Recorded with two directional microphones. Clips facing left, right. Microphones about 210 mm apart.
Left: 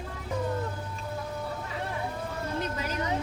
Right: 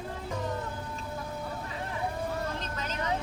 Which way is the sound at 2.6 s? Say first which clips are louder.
Left 5 dB; 10° left (ahead or behind).